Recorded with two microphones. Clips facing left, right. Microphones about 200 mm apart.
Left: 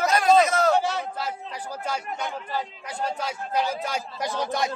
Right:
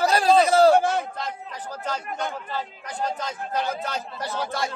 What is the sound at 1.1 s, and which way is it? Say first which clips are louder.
A man's voice: left 1 dB; 10° left (ahead or behind).